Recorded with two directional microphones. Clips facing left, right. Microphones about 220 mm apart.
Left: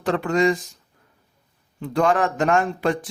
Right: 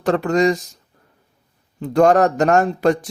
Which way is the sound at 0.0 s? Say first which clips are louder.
Right 3 dB; 40° right (ahead or behind).